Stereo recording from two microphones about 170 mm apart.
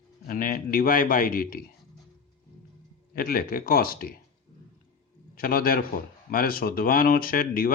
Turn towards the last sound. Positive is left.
turn(degrees=55)  # may be behind; listen again after turning